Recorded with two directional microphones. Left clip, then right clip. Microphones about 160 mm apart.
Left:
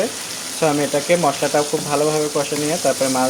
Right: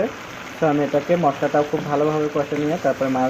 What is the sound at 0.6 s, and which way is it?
Speech, 40° left (ahead or behind).